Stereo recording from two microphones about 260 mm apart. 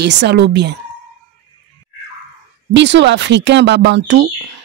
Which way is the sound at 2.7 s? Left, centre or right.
Right.